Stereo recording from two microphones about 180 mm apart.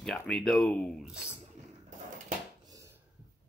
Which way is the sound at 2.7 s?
20° right (ahead or behind).